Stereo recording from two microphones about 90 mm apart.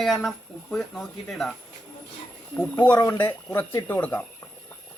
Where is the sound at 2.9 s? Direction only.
40° left (ahead or behind).